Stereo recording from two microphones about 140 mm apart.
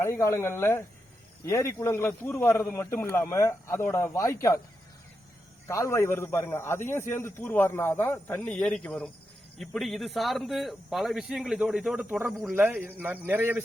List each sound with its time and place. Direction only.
0.0 s a man's voice: 20° left (ahead or behind)
5.6 s a man's voice: 20° left (ahead or behind); by 12.0 s 5° right (ahead or behind)
12.0 s a man's voice: 15° right (ahead or behind)